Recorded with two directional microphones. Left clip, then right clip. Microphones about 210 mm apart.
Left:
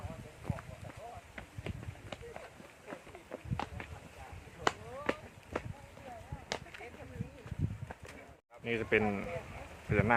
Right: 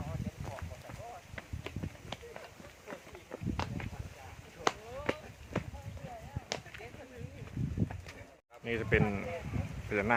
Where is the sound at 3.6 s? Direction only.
40° right (ahead or behind).